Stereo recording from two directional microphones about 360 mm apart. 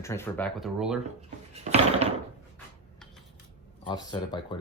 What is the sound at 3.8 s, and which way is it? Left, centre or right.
Speech, centre.